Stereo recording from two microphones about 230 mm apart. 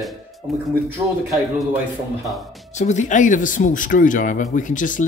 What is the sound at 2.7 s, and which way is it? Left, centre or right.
Speech, left.